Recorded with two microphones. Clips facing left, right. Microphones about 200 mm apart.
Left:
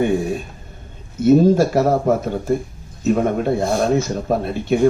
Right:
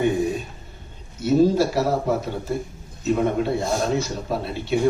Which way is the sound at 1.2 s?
50° left (ahead or behind).